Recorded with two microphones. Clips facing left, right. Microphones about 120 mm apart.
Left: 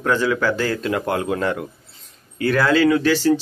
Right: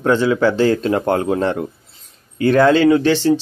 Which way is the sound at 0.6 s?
30° right (ahead or behind).